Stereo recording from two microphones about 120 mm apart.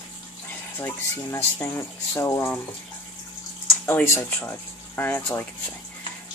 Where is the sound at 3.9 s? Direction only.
15° left (ahead or behind).